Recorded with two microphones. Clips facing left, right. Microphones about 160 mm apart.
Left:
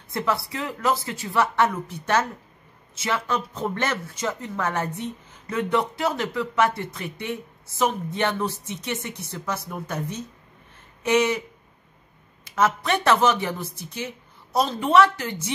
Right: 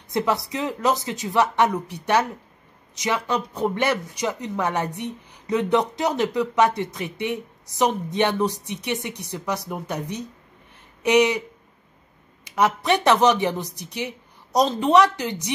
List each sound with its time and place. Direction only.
0.1 s speech: 20° right (ahead or behind)
12.4 s speech: 15° right (ahead or behind)